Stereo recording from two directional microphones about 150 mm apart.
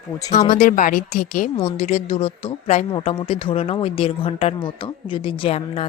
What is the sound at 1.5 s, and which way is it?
A woman's voice, 40° left (ahead or behind).